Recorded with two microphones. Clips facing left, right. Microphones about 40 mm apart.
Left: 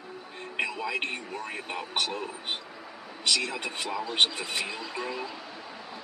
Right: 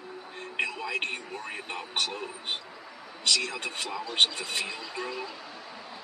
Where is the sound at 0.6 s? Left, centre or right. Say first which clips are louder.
Even; centre.